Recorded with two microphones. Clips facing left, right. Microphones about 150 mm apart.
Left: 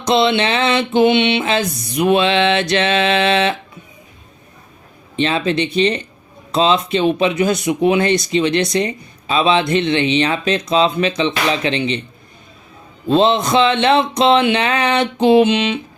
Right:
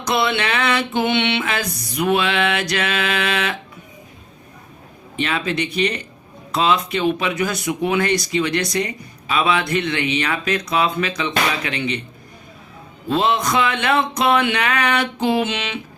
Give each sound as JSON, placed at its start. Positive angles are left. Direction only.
{"t": 0.0, "sound": "speech", "side_deg": 25}
{"t": 5.1, "sound": "speech", "side_deg": 25}
{"t": 13.1, "sound": "speech", "side_deg": 25}